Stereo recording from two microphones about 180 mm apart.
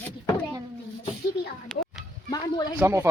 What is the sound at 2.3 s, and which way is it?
Speech, 20° left (ahead or behind).